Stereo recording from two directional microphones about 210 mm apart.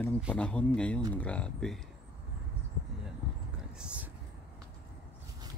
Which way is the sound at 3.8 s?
5° right (ahead or behind).